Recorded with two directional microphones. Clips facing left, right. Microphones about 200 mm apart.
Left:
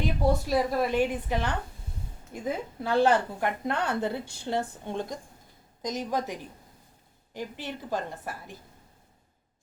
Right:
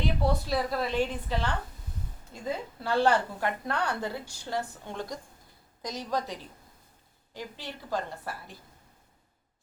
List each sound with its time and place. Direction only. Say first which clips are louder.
0.0 s a woman's voice: left 2 dB; 15° left (ahead or behind)